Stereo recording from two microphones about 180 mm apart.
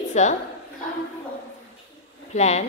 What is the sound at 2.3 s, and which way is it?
Speech, 40° left (ahead or behind).